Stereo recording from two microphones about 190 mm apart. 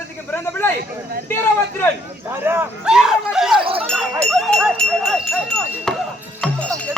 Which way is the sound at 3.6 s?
30° right (ahead or behind).